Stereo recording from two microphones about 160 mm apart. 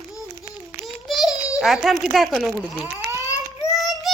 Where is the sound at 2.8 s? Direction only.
20° right (ahead or behind).